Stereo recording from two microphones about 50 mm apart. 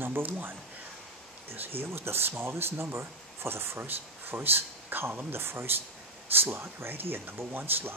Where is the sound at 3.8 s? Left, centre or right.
Right.